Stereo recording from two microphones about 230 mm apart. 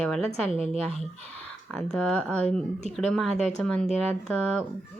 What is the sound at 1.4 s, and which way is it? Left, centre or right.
Speech, centre.